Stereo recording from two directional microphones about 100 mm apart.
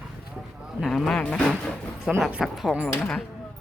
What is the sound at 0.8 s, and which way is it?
Speech, centre (ahead or behind).